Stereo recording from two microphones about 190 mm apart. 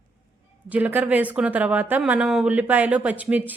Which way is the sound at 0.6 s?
10° right (ahead or behind).